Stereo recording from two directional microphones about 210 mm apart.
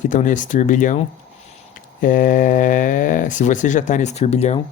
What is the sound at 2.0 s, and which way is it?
Speech, 40° left (ahead or behind).